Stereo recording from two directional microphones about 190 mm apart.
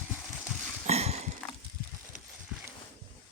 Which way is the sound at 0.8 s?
35° right (ahead or behind).